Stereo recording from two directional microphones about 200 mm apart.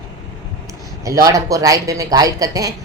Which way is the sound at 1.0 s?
15° right (ahead or behind).